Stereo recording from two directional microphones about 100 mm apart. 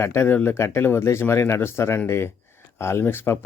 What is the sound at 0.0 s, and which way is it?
Speech, 25° left (ahead or behind).